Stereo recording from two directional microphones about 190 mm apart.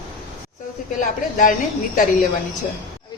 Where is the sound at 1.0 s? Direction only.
45° left (ahead or behind).